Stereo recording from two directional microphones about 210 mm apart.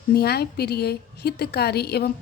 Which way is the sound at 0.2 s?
50° left (ahead or behind).